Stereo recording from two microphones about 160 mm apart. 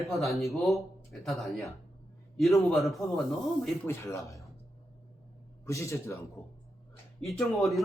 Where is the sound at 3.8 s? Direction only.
20° left (ahead or behind).